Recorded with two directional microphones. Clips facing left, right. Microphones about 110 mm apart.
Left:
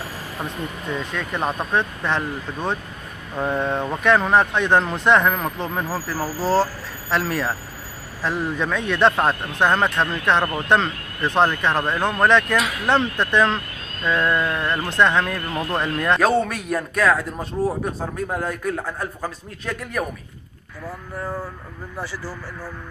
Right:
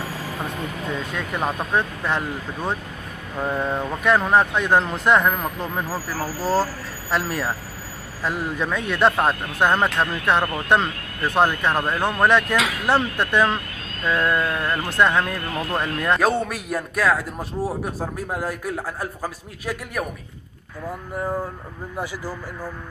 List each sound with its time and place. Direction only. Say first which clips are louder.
1.1 s a man's voice: left 1 dB; 5° right (ahead or behind)
21.9 s a man's voice: right 2 dB; 15° right (ahead or behind)